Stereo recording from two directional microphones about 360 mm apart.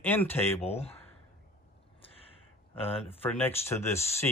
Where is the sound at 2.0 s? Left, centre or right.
Centre.